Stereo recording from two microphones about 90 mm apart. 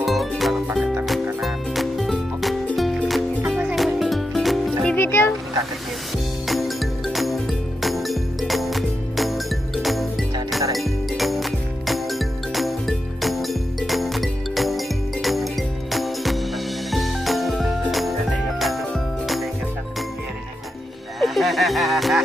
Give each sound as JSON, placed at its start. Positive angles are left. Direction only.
{"t": 0.0, "sound": "music", "side_deg": 0}
{"t": 3.4, "sound": "music", "side_deg": -10}
{"t": 3.7, "sound": "music", "side_deg": 0}
{"t": 4.9, "sound": "music", "side_deg": 25}
{"t": 6.4, "sound": "music", "side_deg": 0}
{"t": 21.2, "sound": "music", "side_deg": 0}